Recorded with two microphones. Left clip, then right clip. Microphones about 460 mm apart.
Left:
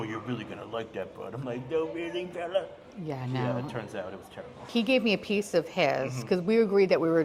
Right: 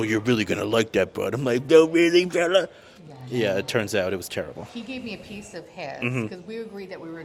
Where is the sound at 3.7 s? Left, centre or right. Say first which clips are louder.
Right 13 dB; right.